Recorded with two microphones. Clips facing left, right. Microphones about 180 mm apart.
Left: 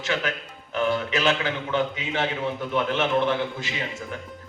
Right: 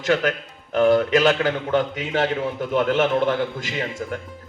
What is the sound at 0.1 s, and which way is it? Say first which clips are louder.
A man's voice: right 7 dB; 45° right (ahead or behind).